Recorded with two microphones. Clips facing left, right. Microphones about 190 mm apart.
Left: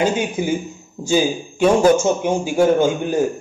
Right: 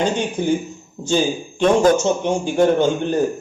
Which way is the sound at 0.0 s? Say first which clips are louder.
Left 1 dB; 10° left (ahead or behind).